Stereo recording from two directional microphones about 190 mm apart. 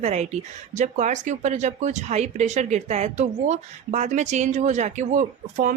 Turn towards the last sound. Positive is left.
turn(degrees=-40)  # may be behind; listen again after turning